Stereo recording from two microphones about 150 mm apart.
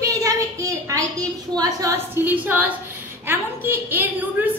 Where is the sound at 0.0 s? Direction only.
20° right (ahead or behind).